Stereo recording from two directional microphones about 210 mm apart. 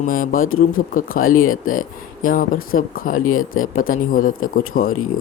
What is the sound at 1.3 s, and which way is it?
Speech, 85° left.